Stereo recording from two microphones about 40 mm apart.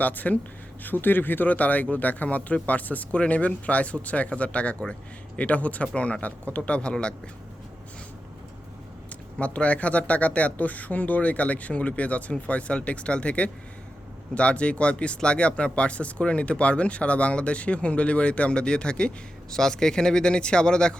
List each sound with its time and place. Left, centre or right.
0.0 s speech: left
0.9 s speech: left
9.4 s speech: left